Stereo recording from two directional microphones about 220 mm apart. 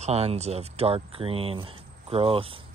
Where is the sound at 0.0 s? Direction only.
30° right (ahead or behind).